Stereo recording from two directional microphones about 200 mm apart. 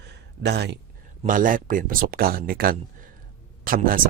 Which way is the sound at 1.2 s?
40° right (ahead or behind).